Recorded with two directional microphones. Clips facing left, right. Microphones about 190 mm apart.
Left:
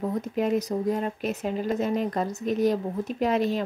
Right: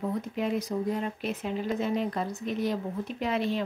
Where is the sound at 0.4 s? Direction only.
45° left (ahead or behind).